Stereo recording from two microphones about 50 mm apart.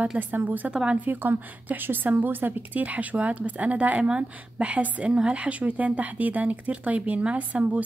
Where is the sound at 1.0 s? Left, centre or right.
Right.